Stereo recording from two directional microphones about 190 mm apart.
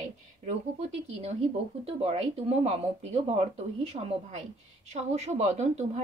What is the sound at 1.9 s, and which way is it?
Speech, 35° right (ahead or behind).